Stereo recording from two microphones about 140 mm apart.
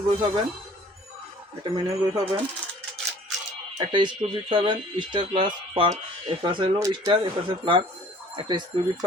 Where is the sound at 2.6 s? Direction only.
15° right (ahead or behind).